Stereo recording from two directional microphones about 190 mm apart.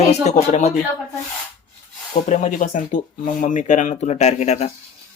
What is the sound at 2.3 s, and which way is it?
Speech, 40° left (ahead or behind).